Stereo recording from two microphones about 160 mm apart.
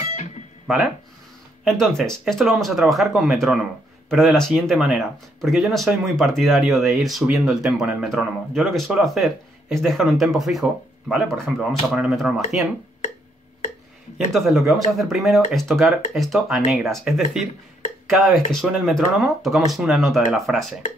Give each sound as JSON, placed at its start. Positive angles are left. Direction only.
{"t": 0.0, "sound": "music", "side_deg": 45}
{"t": 1.6, "sound": "speech", "side_deg": 0}
{"t": 14.1, "sound": "speech", "side_deg": 0}